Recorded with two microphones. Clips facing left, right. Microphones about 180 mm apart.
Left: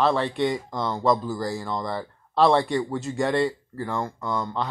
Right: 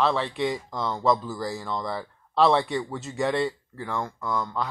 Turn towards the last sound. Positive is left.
turn(degrees=25)  # may be behind; listen again after turning